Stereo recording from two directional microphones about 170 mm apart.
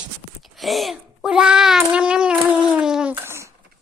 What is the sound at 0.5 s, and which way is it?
A child's voice, centre (ahead or behind).